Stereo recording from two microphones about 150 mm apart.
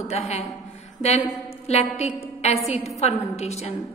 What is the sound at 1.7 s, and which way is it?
A woman's voice, 45° left (ahead or behind).